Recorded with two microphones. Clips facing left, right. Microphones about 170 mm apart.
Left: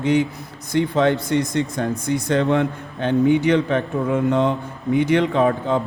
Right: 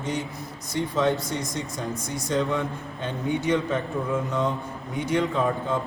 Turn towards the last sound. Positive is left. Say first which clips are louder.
# left 6 dB
turn(degrees=70)  # may be behind; listen again after turning